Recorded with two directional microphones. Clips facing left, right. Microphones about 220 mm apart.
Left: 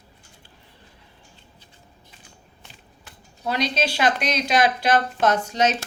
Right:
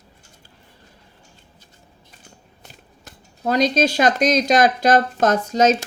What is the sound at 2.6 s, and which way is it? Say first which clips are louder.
Speech: right 5 dB; 45° right (ahead or behind).